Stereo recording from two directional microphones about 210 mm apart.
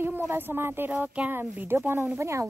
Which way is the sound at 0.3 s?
10° right (ahead or behind).